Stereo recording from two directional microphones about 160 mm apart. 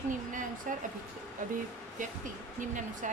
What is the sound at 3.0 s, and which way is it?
Speech, 50° right (ahead or behind).